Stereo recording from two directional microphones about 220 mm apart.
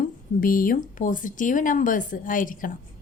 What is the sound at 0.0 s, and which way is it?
A woman's voice, 40° left (ahead or behind).